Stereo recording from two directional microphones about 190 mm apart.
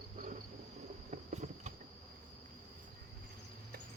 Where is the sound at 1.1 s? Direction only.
40° right (ahead or behind).